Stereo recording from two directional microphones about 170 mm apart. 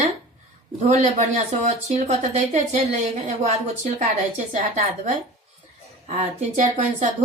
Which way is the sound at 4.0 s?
45° right (ahead or behind).